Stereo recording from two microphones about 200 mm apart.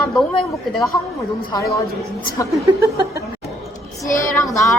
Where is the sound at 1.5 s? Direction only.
20° left (ahead or behind).